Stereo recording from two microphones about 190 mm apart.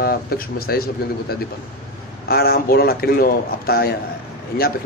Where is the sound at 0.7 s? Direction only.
55° left (ahead or behind).